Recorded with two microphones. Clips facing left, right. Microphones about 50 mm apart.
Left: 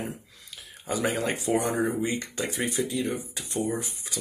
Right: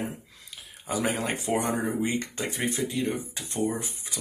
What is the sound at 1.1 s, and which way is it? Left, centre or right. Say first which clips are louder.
Speech: left 2 dB; right.